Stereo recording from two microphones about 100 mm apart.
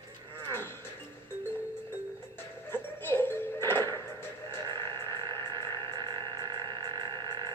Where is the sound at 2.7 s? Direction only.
20° left (ahead or behind).